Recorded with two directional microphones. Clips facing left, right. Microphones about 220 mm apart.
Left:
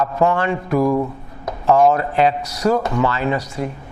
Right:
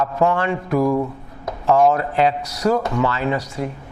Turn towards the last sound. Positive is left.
turn(degrees=15)  # may be behind; listen again after turning